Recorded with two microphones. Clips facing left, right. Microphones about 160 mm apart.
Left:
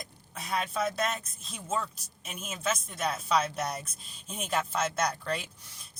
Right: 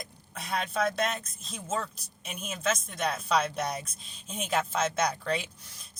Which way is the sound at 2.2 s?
5° left (ahead or behind).